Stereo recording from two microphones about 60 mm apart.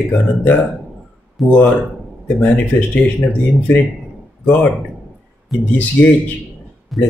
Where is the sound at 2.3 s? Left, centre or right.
Left.